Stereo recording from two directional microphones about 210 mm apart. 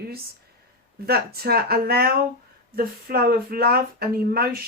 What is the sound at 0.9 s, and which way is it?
Speech, 50° right (ahead or behind).